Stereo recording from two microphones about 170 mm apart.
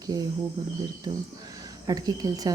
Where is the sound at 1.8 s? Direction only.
20° right (ahead or behind).